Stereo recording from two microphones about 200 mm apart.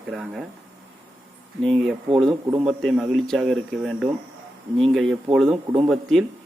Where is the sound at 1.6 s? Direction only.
Centre (ahead or behind).